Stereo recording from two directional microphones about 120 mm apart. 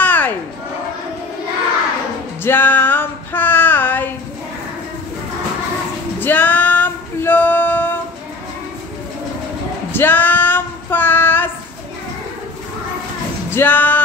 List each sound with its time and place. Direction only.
0.0 s a sound: 15° left (ahead or behind)
2.4 s female singing: 15° left (ahead or behind)
6.1 s music: 15° left (ahead or behind)
9.9 s child singing: 15° left (ahead or behind)
13.5 s music: 15° left (ahead or behind)